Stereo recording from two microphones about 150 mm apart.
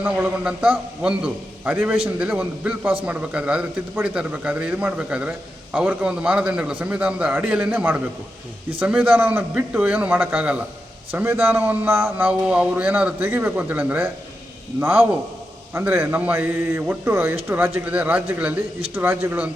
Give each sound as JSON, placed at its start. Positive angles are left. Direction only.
{"t": 0.0, "sound": "speech", "side_deg": -10}